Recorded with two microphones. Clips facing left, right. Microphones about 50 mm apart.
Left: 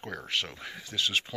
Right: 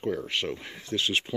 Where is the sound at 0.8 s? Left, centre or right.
Right.